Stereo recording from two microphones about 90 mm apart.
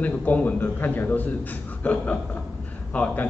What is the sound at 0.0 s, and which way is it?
A man's voice, 15° left (ahead or behind).